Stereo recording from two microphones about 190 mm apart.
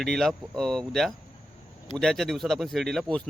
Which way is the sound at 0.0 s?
Centre (ahead or behind).